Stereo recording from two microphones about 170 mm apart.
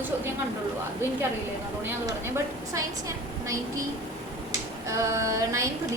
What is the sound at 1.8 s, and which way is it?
A woman's voice, 15° right (ahead or behind).